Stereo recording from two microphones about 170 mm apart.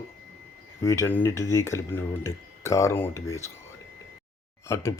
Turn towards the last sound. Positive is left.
turn(degrees=15)  # may be behind; listen again after turning